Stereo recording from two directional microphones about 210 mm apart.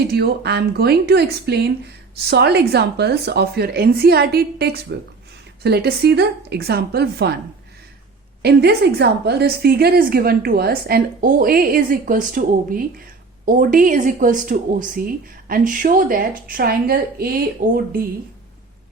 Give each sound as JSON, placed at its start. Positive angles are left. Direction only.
{"t": 0.1, "sound": "a woman's voice", "side_deg": -50}
{"t": 8.4, "sound": "a woman's voice", "side_deg": -50}